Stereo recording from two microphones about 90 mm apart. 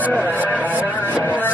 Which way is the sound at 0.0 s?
20° left (ahead or behind).